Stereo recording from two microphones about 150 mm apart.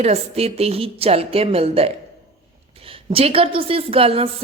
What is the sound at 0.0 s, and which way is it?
A woman's voice, 45° right (ahead or behind).